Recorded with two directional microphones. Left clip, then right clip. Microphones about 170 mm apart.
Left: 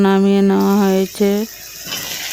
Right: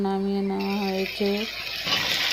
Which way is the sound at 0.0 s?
65° left (ahead or behind).